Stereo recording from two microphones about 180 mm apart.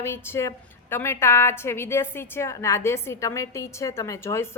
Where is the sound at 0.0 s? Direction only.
15° left (ahead or behind).